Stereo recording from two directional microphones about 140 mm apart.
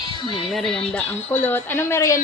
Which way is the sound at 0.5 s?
5° left (ahead or behind).